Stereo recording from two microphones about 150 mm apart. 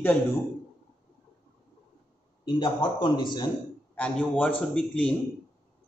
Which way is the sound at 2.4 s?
35° left (ahead or behind).